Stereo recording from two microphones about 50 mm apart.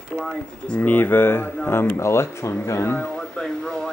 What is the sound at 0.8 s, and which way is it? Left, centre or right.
Speech, left.